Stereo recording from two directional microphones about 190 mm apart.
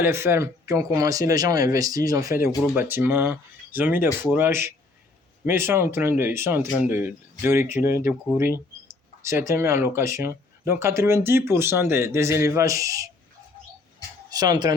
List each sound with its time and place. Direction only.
0.0 s speech: 15° right (ahead or behind)
14.3 s speech: 20° right (ahead or behind)